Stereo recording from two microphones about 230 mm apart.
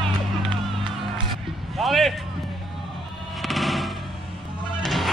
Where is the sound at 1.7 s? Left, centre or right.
Centre.